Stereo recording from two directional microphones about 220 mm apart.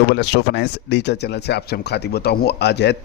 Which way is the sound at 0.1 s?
50° left (ahead or behind).